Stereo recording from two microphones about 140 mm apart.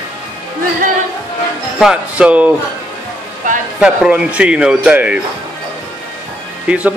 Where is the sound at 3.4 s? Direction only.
70° right (ahead or behind).